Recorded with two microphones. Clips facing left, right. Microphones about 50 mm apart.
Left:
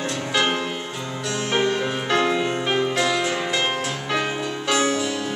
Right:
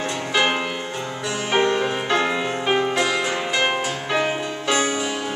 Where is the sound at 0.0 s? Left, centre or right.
Centre.